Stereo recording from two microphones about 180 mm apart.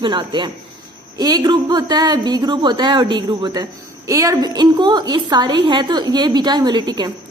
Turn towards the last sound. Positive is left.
turn(degrees=-25)  # may be behind; listen again after turning